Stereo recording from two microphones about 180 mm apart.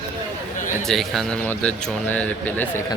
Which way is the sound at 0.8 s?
Centre (ahead or behind).